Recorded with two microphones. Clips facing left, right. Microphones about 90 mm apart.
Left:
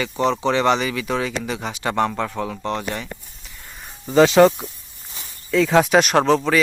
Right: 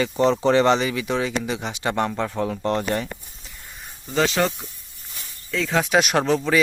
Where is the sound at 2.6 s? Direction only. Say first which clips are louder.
Right 5 dB; 40° right (ahead or behind).